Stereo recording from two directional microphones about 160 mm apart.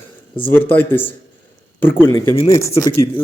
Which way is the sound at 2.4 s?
20° left (ahead or behind).